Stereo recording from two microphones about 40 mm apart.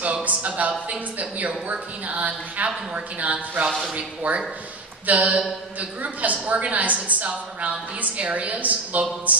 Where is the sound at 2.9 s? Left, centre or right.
Right.